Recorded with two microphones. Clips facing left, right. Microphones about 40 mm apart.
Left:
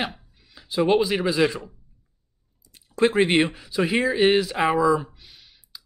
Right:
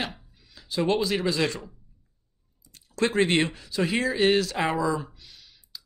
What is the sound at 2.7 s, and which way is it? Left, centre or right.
Speech, centre.